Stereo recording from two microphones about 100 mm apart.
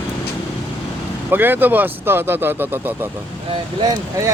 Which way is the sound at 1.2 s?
20° right (ahead or behind).